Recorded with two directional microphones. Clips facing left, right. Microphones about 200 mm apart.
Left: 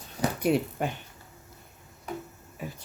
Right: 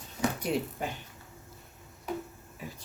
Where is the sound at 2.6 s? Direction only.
60° left (ahead or behind).